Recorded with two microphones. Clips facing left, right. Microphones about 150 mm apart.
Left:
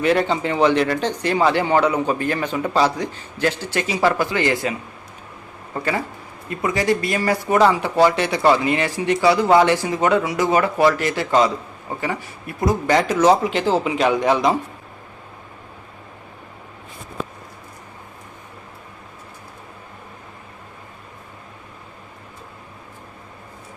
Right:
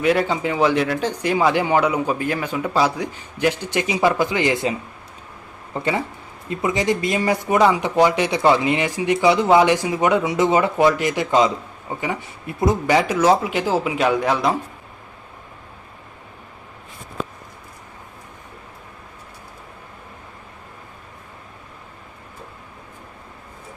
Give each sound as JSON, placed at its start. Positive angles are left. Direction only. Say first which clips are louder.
{"t": 0.0, "sound": "speech", "louder": "even", "side_deg": -5}
{"t": 6.5, "sound": "speech", "louder": "left 1 dB", "side_deg": -20}
{"t": 13.0, "sound": "speech", "louder": "left 4 dB", "side_deg": -10}